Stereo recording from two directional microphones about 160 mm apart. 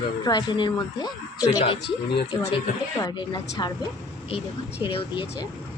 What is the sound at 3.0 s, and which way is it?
Speech, 25° left (ahead or behind).